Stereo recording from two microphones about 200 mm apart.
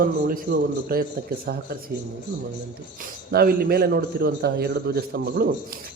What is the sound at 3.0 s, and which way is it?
A man's voice, 50° right (ahead or behind).